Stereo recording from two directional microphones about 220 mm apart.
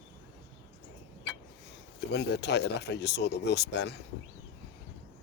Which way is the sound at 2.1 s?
50° left (ahead or behind).